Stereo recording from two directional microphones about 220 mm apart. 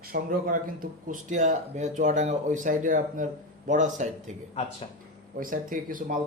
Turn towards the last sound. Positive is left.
turn(degrees=-40)  # may be behind; listen again after turning